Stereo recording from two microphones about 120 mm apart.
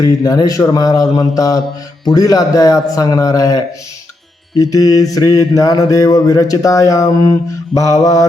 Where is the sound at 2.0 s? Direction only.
30° left (ahead or behind).